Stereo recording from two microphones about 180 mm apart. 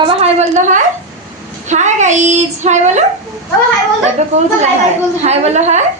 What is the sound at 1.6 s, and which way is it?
Child singing, 40° right (ahead or behind).